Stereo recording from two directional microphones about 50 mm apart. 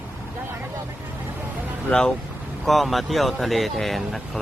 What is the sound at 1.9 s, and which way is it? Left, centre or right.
Speech, centre.